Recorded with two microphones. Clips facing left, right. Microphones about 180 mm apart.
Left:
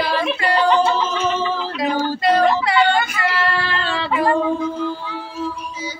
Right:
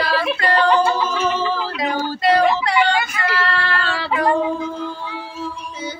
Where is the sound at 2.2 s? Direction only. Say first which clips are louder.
Right 1 dB; centre (ahead or behind).